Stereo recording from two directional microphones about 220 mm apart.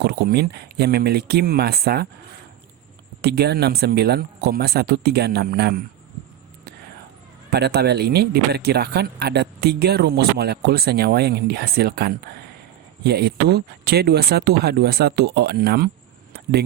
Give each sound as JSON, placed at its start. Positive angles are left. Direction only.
{"t": 0.0, "sound": "speech", "side_deg": -45}
{"t": 3.2, "sound": "speech", "side_deg": -45}
{"t": 7.5, "sound": "speech", "side_deg": -45}
{"t": 16.3, "sound": "a sound", "side_deg": -45}